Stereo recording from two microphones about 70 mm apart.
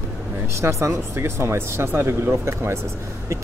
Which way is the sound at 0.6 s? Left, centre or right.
Right.